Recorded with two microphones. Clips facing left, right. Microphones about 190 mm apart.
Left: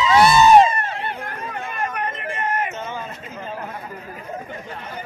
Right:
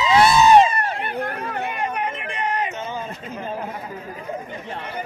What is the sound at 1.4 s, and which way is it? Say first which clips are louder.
Chatter: right 3 dB; 65° right (ahead or behind).